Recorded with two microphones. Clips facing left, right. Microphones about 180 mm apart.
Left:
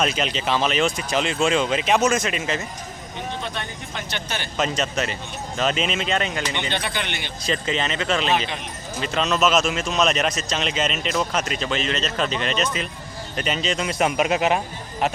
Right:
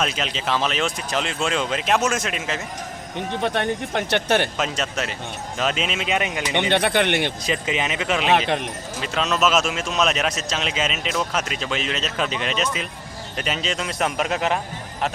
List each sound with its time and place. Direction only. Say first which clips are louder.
0.0 s a man's voice: left 2 dB; centre (ahead or behind)
3.4 s speech: right 9 dB; 65° right (ahead or behind)
4.5 s a man's voice: left 2 dB; 5° right (ahead or behind)
6.5 s speech: right 7 dB; 65° right (ahead or behind)
7.4 s speech: even; 10° right (ahead or behind)
8.3 s speech: right 4 dB; 60° right (ahead or behind)
9.0 s a man's voice: left 1 dB; 5° right (ahead or behind)